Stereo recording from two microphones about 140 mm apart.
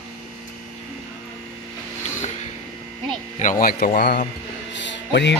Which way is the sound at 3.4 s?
80° left.